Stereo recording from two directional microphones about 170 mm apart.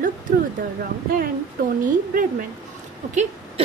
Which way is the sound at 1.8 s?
55° right (ahead or behind).